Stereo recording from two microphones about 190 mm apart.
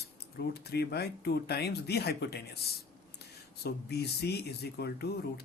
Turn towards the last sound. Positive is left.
turn(degrees=55)  # may be behind; listen again after turning